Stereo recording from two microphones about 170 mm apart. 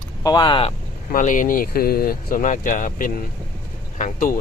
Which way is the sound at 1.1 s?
50° left (ahead or behind).